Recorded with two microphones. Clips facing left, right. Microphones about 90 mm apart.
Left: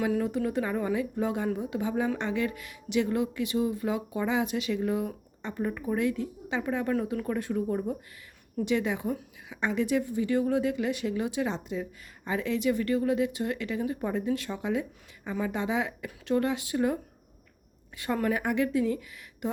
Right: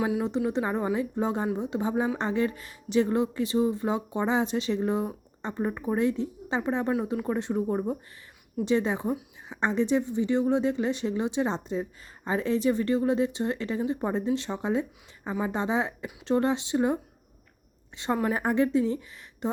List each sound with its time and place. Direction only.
0.1 s a woman's voice: 20° right (ahead or behind)